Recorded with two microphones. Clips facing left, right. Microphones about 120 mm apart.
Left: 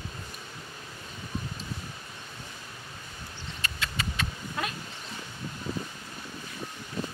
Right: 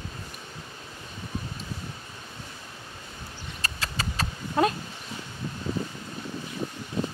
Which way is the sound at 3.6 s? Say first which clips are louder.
Right 2 dB; 35° right (ahead or behind).